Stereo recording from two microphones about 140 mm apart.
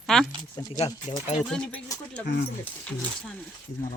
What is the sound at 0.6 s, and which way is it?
Speech, 25° left (ahead or behind).